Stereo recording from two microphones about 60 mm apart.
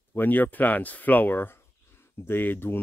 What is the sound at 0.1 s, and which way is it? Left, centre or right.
Speech, left.